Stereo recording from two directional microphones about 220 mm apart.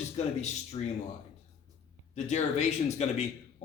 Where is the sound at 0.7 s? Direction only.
25° left (ahead or behind).